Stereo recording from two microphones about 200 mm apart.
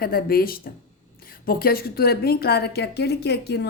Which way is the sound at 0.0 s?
50° left (ahead or behind).